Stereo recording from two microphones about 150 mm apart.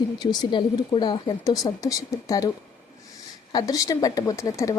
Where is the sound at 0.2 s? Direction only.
30° left (ahead or behind).